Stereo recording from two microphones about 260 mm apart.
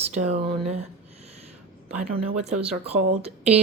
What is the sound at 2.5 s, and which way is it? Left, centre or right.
Speech, right.